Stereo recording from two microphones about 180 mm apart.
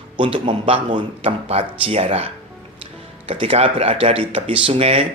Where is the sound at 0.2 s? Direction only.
30° right (ahead or behind).